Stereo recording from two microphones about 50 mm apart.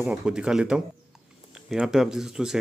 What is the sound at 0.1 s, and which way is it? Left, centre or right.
Speech, centre.